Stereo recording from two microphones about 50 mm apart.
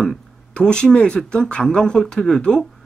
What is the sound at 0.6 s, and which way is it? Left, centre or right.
Speech, centre.